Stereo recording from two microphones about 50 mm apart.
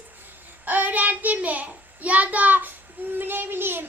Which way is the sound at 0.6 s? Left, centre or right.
Right.